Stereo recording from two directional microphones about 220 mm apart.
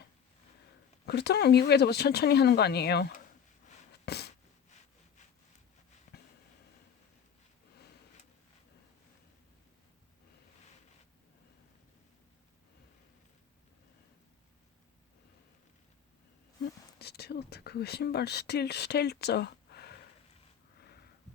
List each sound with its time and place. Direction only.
1.0 s speech: 50° left (ahead or behind)
4.0 s a sound: 50° left (ahead or behind)
17.0 s speech: 45° left (ahead or behind)